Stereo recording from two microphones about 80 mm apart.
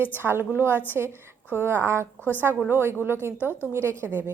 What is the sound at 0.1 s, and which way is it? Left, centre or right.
A woman's voice, right.